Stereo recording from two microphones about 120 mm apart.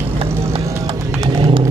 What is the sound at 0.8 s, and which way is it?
Music, 50° right (ahead or behind).